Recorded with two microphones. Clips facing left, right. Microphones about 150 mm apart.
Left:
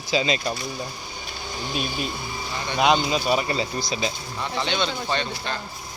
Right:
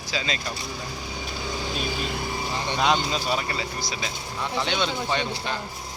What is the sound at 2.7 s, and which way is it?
Speech, 15° left (ahead or behind).